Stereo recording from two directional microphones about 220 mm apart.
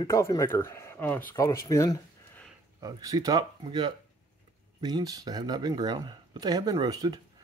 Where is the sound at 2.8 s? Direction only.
15° right (ahead or behind).